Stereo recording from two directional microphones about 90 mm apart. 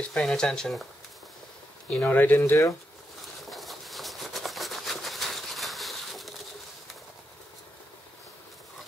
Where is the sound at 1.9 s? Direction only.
20° left (ahead or behind).